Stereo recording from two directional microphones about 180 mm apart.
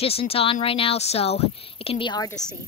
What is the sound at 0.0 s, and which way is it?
Speech, 35° left (ahead or behind).